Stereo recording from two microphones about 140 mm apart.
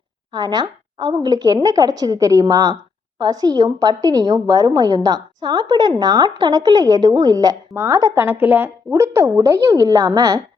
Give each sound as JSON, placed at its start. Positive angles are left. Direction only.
{"t": 0.3, "sound": "a woman's voice", "side_deg": -30}